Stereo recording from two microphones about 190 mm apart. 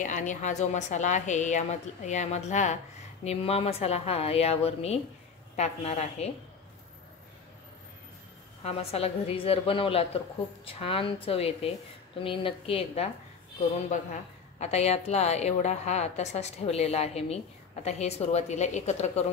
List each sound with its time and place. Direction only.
0.0 s a woman's voice: 40° left (ahead or behind)
8.6 s a woman's voice: 30° left (ahead or behind)